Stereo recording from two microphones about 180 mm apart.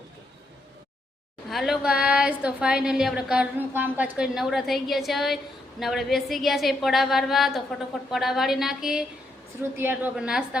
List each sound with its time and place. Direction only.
1.5 s a woman's voice: centre (ahead or behind)